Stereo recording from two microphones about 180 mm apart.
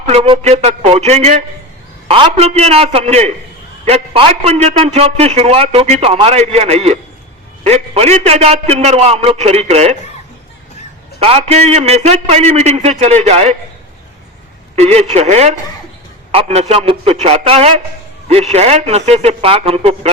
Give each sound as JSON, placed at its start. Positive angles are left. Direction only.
{"t": 0.0, "sound": "a man's voice", "side_deg": -35}
{"t": 11.2, "sound": "a man's voice", "side_deg": -30}
{"t": 14.8, "sound": "a man's voice", "side_deg": -35}